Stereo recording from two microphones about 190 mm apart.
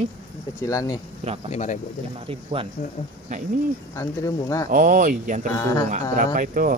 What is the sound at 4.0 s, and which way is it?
Speech, 15° left (ahead or behind).